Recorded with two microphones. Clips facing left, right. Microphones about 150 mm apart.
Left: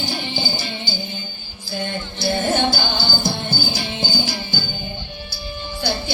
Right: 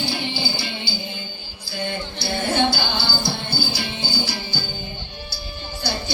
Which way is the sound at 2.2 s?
50° left (ahead or behind).